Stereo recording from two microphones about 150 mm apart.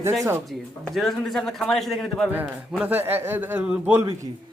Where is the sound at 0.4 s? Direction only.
Centre (ahead or behind).